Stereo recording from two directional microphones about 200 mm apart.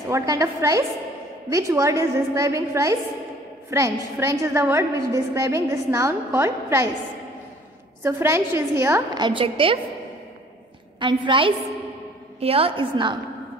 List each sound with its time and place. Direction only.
0.1 s a woman's voice: 15° right (ahead or behind)
8.0 s a woman's voice: 10° right (ahead or behind)
11.0 s a woman's voice: 25° right (ahead or behind)